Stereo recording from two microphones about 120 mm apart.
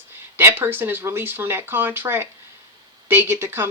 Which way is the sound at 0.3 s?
20° right (ahead or behind).